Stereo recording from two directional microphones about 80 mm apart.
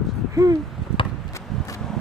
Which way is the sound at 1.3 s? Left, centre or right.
Left.